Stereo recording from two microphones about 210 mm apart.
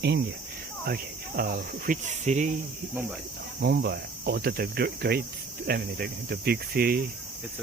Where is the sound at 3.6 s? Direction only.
50° right (ahead or behind).